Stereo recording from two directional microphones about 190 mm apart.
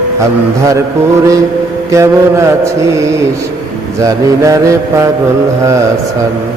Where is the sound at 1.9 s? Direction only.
15° right (ahead or behind).